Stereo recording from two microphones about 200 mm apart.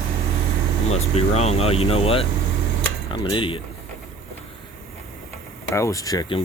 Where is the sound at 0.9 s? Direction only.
30° left (ahead or behind).